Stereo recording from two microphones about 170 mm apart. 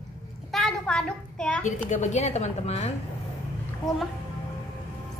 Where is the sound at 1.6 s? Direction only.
45° left (ahead or behind).